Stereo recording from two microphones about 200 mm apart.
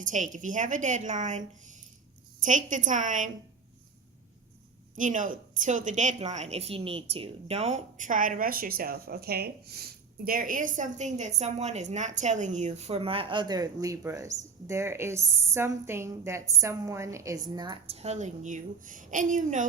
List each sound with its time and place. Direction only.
0.0 s a woman's voice: 40° right (ahead or behind)
4.9 s a woman's voice: 40° right (ahead or behind)